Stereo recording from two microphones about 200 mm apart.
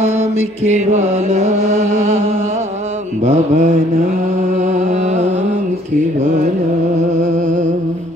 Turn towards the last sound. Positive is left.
turn(degrees=-40)  # may be behind; listen again after turning